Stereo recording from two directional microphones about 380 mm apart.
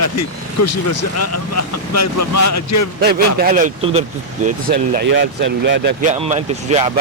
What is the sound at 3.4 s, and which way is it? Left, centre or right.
Speech, right.